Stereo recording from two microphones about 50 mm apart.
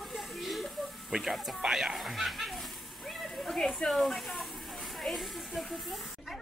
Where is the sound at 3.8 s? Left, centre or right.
Centre.